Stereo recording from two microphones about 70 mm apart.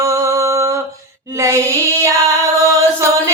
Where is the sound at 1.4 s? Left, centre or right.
Right.